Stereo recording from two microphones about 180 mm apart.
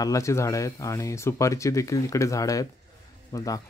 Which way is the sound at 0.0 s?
15° left (ahead or behind).